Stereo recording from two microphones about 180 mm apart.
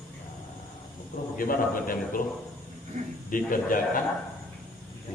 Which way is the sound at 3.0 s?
40° right (ahead or behind).